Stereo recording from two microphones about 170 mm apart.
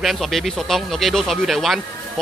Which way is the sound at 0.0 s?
Centre (ahead or behind).